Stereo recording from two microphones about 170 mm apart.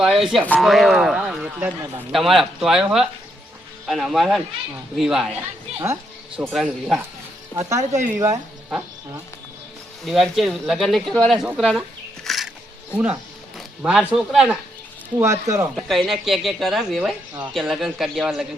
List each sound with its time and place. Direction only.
0.0 s speech: centre (ahead or behind)
5.8 s speech: 15° right (ahead or behind)
6.5 s speech: 5° right (ahead or behind)
7.5 s speech: 20° right (ahead or behind)
10.1 s speech: centre (ahead or behind)
13.6 s speech: 5° right (ahead or behind)
15.2 s speech: 15° right (ahead or behind)
15.7 s speech: centre (ahead or behind)